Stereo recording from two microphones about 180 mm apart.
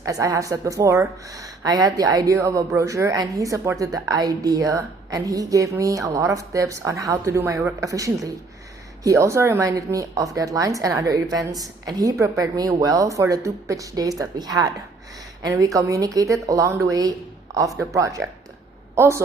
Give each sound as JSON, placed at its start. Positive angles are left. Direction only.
{"t": 0.0, "sound": "a woman's voice", "side_deg": -20}